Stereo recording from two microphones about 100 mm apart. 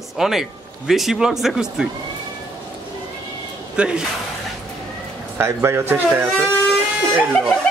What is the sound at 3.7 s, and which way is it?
Speech, 10° right (ahead or behind).